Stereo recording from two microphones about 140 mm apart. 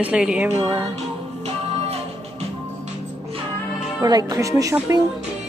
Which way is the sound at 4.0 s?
30° right (ahead or behind).